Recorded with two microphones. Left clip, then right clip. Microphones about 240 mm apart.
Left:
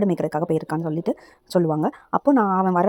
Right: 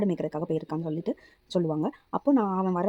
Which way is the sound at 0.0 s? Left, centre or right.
Left.